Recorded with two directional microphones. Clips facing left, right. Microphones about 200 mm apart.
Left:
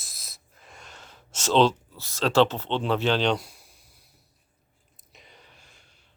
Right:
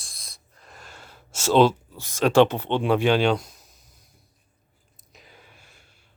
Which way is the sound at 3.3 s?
10° left (ahead or behind).